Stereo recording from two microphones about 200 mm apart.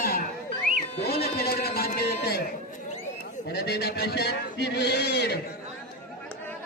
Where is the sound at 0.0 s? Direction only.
45° left (ahead or behind).